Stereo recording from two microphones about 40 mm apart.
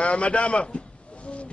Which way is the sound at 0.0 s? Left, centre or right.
Left.